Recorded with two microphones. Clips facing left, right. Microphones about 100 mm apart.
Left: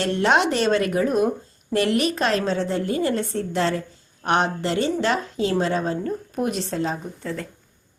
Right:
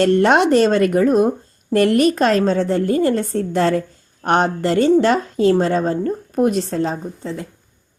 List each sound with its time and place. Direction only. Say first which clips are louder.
0.0 s a woman's voice: right 6 dB; 50° right (ahead or behind)